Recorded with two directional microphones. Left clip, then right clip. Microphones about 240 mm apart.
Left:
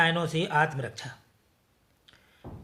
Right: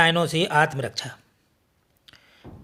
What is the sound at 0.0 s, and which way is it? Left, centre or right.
Speech, right.